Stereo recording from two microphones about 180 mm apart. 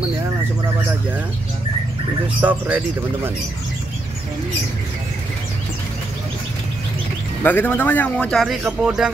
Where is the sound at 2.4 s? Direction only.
10° right (ahead or behind).